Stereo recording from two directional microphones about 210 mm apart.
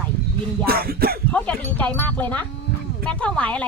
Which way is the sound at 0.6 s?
45° right (ahead or behind).